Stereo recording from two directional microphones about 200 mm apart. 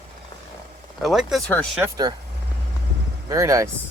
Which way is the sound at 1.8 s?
20° right (ahead or behind).